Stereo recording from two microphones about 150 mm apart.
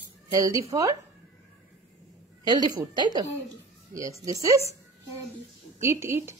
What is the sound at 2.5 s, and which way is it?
Speech, 30° right (ahead or behind).